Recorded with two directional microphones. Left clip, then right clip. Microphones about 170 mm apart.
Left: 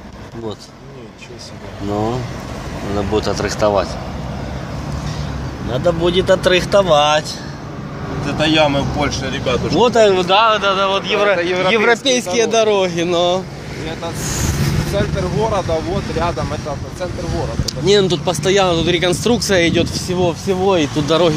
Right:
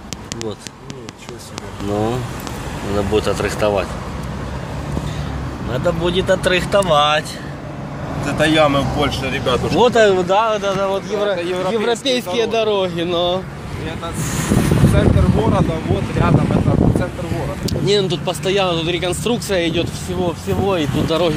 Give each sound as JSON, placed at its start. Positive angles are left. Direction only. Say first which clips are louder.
{"t": 3.1, "sound": "speech", "louder": "even", "side_deg": 0}
{"t": 5.7, "sound": "speech", "louder": "left 3 dB", "side_deg": 10}
{"t": 8.3, "sound": "speech", "louder": "even", "side_deg": -35}
{"t": 9.0, "sound": "speech", "louder": "even", "side_deg": -20}
{"t": 9.8, "sound": "speech", "louder": "left 1 dB", "side_deg": -5}
{"t": 11.1, "sound": "speech", "louder": "left 6 dB", "side_deg": 20}
{"t": 11.9, "sound": "speech", "louder": "left 3 dB", "side_deg": 10}
{"t": 13.8, "sound": "speech", "louder": "left 1 dB", "side_deg": 55}
{"t": 17.8, "sound": "speech", "louder": "left 4 dB", "side_deg": 35}